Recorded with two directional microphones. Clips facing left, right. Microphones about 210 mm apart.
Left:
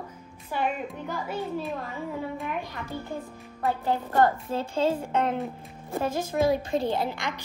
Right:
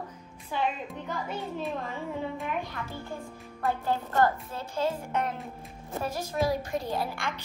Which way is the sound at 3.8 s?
25° left (ahead or behind).